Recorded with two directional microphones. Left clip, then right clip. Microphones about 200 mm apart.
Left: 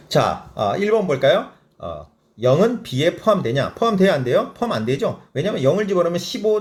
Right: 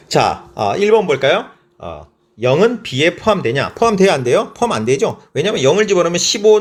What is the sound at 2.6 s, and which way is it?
Speech, 25° right (ahead or behind).